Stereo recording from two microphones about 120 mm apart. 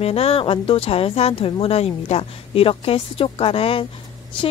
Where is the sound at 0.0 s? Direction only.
55° left (ahead or behind).